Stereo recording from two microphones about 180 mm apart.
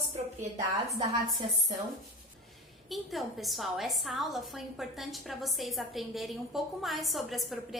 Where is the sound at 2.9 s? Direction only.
Centre (ahead or behind).